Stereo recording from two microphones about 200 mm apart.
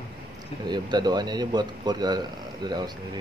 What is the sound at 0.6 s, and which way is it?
A man's voice, 20° right (ahead or behind).